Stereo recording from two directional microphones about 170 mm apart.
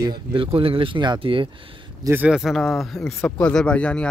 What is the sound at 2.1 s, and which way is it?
Speech, 10° right (ahead or behind).